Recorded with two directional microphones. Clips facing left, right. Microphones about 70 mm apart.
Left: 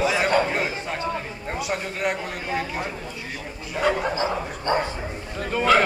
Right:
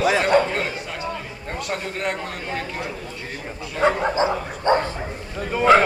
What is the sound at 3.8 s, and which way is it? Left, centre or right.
Speech, right.